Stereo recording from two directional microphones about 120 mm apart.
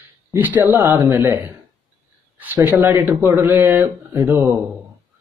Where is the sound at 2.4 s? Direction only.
15° right (ahead or behind).